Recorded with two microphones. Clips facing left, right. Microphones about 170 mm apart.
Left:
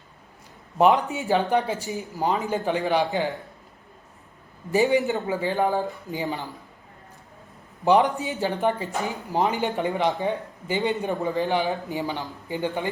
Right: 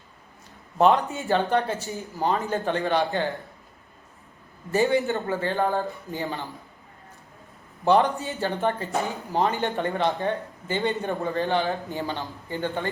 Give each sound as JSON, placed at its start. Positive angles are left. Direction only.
{"t": 0.8, "sound": "speech", "side_deg": 15}
{"t": 4.7, "sound": "speech", "side_deg": 15}
{"t": 7.9, "sound": "speech", "side_deg": 15}